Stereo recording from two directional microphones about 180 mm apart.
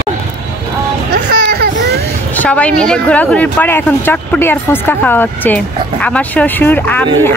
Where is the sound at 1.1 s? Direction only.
60° right (ahead or behind).